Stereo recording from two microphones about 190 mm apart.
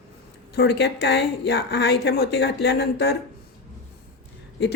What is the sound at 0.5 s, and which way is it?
Speech, 60° left (ahead or behind).